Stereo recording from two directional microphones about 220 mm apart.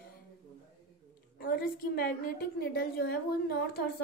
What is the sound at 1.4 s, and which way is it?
A woman's voice, 40° left (ahead or behind).